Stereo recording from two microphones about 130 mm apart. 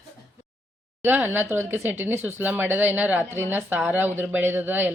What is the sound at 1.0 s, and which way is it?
Speech, 15° right (ahead or behind).